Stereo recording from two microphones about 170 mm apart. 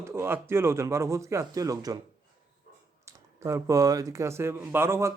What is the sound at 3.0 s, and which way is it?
Speech, 15° right (ahead or behind).